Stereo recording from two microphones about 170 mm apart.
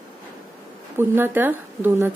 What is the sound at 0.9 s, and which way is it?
A woman's voice, 15° right (ahead or behind).